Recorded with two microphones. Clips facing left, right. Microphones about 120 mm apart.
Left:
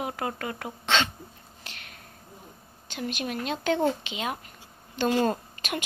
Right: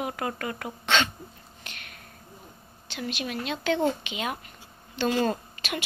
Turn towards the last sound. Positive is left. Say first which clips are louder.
# left 1 dB
turn(degrees=40)  # may be behind; listen again after turning